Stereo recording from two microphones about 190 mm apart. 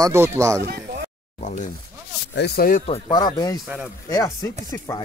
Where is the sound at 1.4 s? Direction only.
40° left (ahead or behind).